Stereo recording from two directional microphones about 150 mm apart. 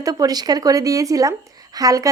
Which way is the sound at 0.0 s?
25° right (ahead or behind).